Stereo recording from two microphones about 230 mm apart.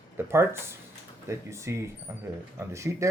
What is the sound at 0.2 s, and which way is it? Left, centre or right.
Speech, centre.